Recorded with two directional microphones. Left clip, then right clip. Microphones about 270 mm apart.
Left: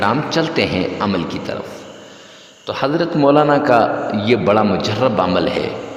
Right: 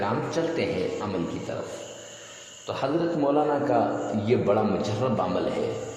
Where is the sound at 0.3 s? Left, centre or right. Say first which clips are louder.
Left 9 dB; left.